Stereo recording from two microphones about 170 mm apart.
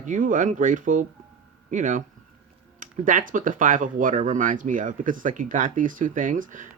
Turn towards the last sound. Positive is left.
turn(degrees=-50)  # may be behind; listen again after turning